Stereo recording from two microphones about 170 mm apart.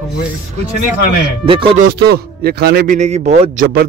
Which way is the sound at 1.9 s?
70° right (ahead or behind).